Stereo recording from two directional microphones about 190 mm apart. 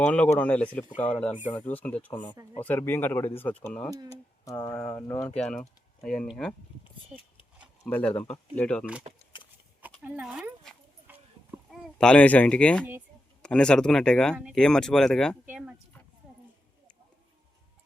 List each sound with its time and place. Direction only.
0.0 s speech: 10° left (ahead or behind)
5.4 s speech: 5° left (ahead or behind)
7.9 s speech: 10° left (ahead or behind)
9.3 s horse: 25° left (ahead or behind)
10.0 s speech: 5° right (ahead or behind)